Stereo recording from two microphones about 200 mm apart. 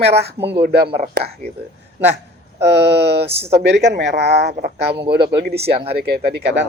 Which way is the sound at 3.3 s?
30° right (ahead or behind).